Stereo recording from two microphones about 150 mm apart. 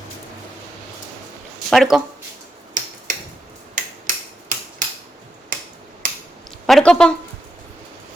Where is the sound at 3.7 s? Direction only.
60° right (ahead or behind).